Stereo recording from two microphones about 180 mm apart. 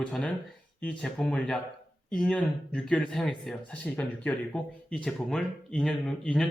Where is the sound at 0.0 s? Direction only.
5° left (ahead or behind).